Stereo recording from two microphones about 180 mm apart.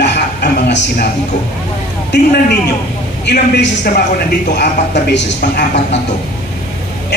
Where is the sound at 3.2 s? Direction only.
70° left (ahead or behind).